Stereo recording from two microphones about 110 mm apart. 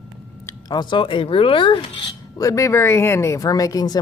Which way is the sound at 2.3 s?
30° left (ahead or behind).